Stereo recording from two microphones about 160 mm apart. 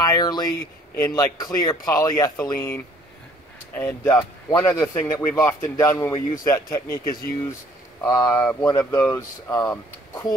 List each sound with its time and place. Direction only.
0.0 s a man's voice: 25° left (ahead or behind)
4.2 s a man's voice: 20° left (ahead or behind)